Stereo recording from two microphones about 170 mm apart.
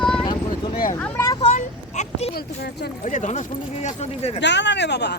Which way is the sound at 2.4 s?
70° left (ahead or behind).